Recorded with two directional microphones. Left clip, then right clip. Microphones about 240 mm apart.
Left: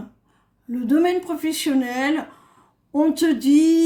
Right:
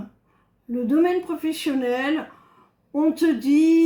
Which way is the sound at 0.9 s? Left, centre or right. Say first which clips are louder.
Left 2 dB; left.